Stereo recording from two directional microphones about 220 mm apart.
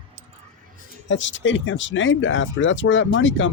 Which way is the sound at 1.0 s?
55° left (ahead or behind).